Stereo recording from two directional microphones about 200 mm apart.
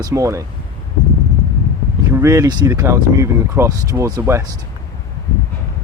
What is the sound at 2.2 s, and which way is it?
Speech, 15° right (ahead or behind).